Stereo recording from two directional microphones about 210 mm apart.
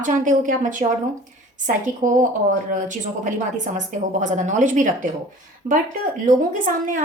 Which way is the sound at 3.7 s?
35° right (ahead or behind).